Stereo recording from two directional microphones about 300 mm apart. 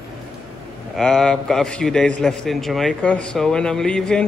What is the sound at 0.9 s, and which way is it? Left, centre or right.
A man's voice, centre.